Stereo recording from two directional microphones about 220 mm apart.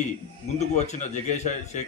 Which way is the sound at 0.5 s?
30° left (ahead or behind).